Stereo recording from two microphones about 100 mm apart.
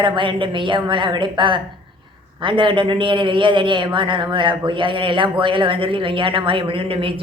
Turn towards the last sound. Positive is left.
turn(degrees=-65)  # may be behind; listen again after turning